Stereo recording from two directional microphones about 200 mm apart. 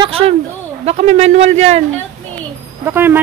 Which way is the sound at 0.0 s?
30° right (ahead or behind).